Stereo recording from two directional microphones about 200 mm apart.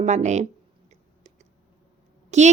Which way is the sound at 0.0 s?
35° right (ahead or behind).